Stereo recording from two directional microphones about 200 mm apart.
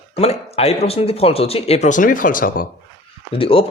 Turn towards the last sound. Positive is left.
turn(degrees=25)  # may be behind; listen again after turning